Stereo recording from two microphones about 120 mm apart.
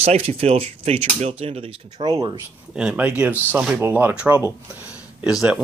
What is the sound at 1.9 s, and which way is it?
Speech, 30° right (ahead or behind).